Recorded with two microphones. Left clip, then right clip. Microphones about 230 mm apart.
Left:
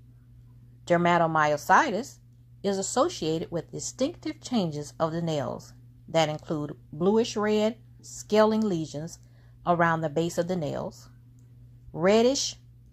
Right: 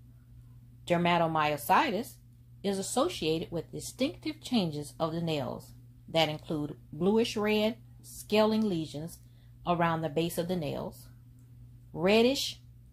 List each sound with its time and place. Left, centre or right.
0.8 s speech: left